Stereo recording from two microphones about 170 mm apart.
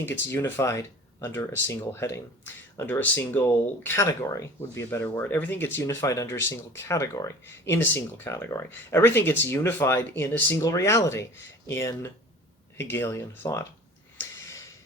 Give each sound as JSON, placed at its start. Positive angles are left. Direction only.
{"t": 0.0, "sound": "speech", "side_deg": 15}